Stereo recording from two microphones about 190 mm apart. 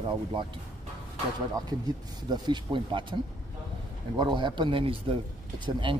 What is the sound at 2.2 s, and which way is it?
Speech, 25° right (ahead or behind).